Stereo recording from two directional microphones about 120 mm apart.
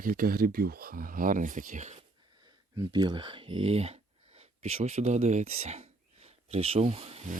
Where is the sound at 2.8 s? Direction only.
35° right (ahead or behind); by 7.4 s 60° right (ahead or behind).